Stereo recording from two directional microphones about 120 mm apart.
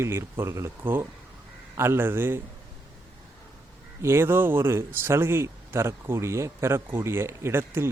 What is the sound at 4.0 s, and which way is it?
Speech, 20° right (ahead or behind).